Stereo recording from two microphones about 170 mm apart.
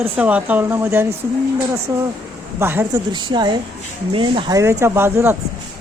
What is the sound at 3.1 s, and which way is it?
A woman's voice, 25° right (ahead or behind).